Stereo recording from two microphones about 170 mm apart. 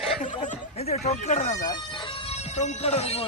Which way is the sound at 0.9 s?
40° left (ahead or behind).